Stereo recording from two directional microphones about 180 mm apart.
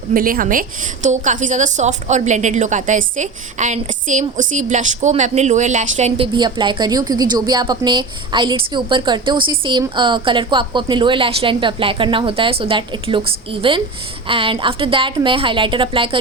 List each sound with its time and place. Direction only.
0.1 s a woman's voice: 50° right (ahead or behind); by 16.0 s 30° right (ahead or behind)